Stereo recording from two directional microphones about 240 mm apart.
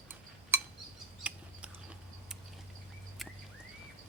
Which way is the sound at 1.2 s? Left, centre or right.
Centre.